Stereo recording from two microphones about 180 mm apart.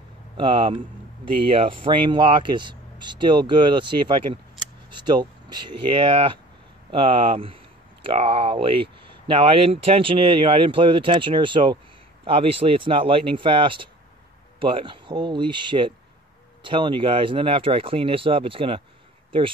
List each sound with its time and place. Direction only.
0.4 s speech: 25° right (ahead or behind)